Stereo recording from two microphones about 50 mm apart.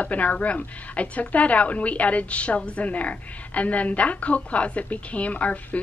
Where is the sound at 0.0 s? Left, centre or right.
Left.